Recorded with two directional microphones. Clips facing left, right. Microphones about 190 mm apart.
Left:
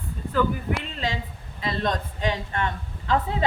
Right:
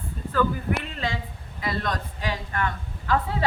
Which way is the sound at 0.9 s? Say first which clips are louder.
Left 1 dB; 20° left (ahead or behind).